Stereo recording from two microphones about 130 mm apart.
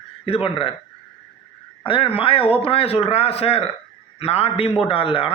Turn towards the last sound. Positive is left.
turn(degrees=45)  # may be behind; listen again after turning